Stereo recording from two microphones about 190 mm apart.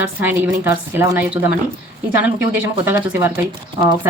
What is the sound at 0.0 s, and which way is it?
Speech, 10° right (ahead or behind).